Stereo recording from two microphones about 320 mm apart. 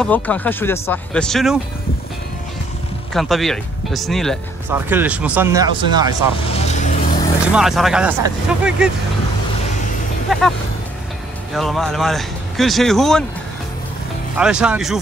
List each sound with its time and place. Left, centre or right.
0.0 s speech: centre
3.1 s speech: centre
6.4 s vehicle: centre
7.5 s speech: centre
10.3 s speech: centre
11.5 s speech: centre
14.3 s speech: centre